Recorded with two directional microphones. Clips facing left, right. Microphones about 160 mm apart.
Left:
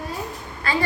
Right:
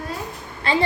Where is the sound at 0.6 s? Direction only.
25° right (ahead or behind).